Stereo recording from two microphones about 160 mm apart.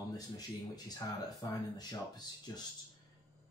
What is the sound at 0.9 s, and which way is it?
Speech, 20° left (ahead or behind).